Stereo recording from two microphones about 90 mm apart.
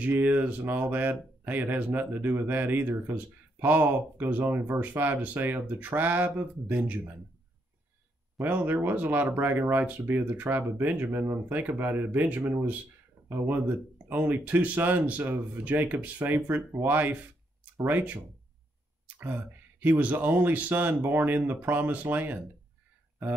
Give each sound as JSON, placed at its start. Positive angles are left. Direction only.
{"t": 0.0, "sound": "speech", "side_deg": -20}
{"t": 8.5, "sound": "speech", "side_deg": -20}